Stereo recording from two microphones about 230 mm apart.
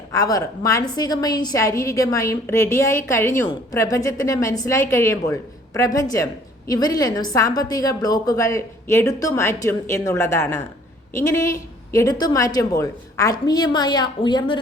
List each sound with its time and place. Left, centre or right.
0.1 s a woman's voice: centre